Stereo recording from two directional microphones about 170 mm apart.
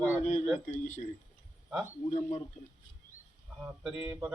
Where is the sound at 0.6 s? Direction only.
45° left (ahead or behind).